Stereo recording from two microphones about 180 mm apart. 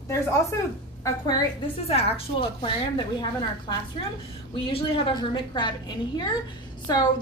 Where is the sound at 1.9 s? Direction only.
35° left (ahead or behind).